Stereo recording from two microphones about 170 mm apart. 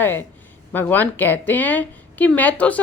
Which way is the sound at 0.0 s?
10° left (ahead or behind).